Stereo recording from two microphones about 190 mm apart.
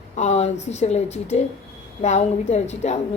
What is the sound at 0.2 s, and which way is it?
Speech, 35° left (ahead or behind).